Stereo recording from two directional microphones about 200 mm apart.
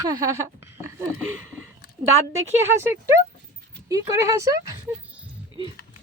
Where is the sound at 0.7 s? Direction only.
15° right (ahead or behind).